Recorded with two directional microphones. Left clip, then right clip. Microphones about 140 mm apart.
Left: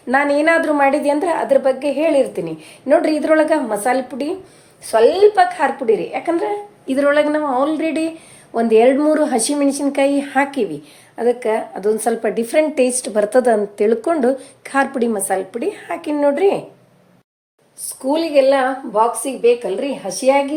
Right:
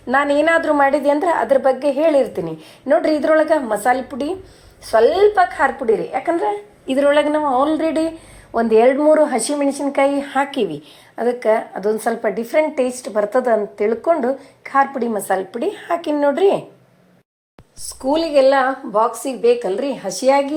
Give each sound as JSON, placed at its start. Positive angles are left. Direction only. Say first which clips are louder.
{"t": 0.1, "sound": "a woman's voice", "louder": "even", "side_deg": -5}
{"t": 8.9, "sound": "speech", "louder": "right 1 dB", "side_deg": 15}
{"t": 10.2, "sound": "a woman's voice", "louder": "left 1 dB", "side_deg": -5}
{"t": 12.2, "sound": "speech", "louder": "right 1 dB", "side_deg": 25}
{"t": 15.3, "sound": "a woman's voice", "louder": "even", "side_deg": 0}
{"t": 15.6, "sound": "a woman's voice", "louder": "right 2 dB", "side_deg": -10}
{"t": 17.8, "sound": "a woman's voice", "louder": "even", "side_deg": -20}